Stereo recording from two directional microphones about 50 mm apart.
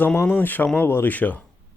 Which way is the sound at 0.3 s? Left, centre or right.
Left.